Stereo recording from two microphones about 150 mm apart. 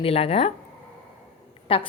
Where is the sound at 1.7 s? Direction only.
35° left (ahead or behind).